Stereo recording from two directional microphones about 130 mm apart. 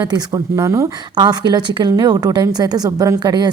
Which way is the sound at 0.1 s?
30° right (ahead or behind).